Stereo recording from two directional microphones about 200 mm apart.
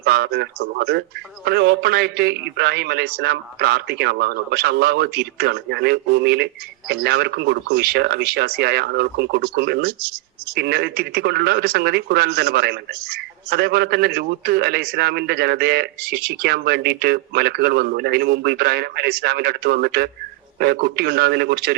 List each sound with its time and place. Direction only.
0.0 s a man's voice: 50° right (ahead or behind)